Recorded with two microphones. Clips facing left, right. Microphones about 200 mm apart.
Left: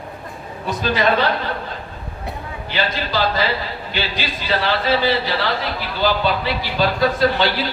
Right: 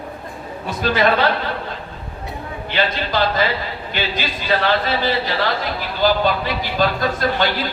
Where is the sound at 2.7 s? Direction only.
50° right (ahead or behind).